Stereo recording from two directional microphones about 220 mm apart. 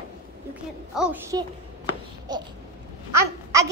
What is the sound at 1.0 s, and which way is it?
Speech, 5° right (ahead or behind).